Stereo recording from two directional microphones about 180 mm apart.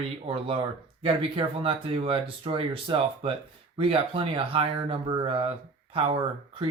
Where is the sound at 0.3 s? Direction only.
30° right (ahead or behind).